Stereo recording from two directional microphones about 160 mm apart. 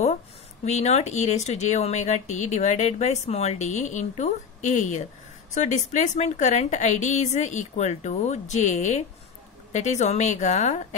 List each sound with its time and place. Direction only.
0.7 s speech: 45° left (ahead or behind)